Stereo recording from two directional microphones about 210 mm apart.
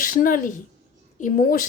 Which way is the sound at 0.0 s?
40° left (ahead or behind).